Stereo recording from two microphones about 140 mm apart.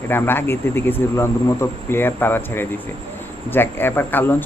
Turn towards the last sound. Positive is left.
turn(degrees=15)  # may be behind; listen again after turning